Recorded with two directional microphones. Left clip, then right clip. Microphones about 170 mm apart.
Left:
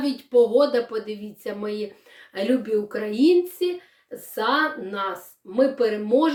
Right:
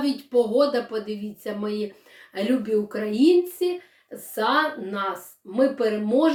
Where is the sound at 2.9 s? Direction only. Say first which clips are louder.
Even; 20° left (ahead or behind).